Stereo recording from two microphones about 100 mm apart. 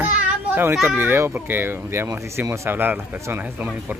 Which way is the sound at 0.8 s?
20° right (ahead or behind).